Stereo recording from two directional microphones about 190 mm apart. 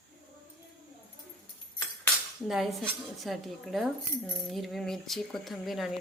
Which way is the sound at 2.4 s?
Centre (ahead or behind).